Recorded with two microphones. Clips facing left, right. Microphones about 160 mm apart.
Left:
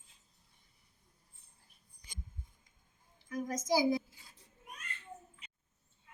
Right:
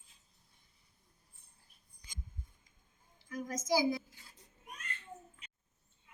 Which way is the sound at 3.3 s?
25° left (ahead or behind).